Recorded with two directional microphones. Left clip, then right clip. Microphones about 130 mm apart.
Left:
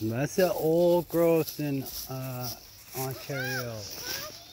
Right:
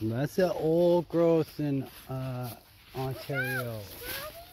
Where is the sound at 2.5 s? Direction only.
40° right (ahead or behind).